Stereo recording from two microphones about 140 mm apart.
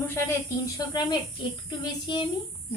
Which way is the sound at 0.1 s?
20° left (ahead or behind).